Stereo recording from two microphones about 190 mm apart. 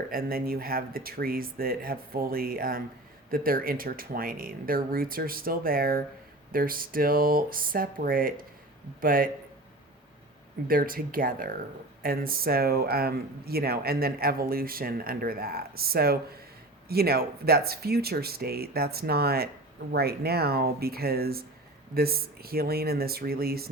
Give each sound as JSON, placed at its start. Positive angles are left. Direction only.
{"t": 0.1, "sound": "speech", "side_deg": -50}
{"t": 10.7, "sound": "speech", "side_deg": -50}